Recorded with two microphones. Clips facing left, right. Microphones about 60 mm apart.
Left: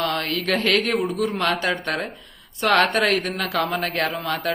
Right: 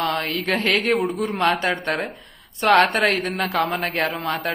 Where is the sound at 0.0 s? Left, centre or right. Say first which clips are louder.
Right 1 dB; right.